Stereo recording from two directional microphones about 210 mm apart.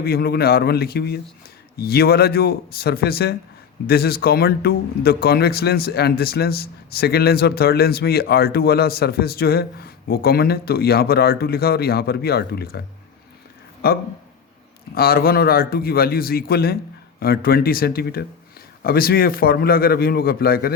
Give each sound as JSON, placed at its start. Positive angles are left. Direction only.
{"t": 0.0, "sound": "a man's voice", "side_deg": 45}
{"t": 13.8, "sound": "a man's voice", "side_deg": 50}